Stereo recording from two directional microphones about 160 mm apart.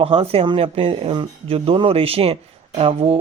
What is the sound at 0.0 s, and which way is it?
Speech, 35° right (ahead or behind).